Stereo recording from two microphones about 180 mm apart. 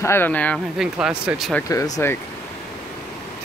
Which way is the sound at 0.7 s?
5° right (ahead or behind).